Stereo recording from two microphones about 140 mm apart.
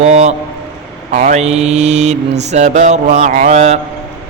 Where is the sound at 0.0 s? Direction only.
55° right (ahead or behind).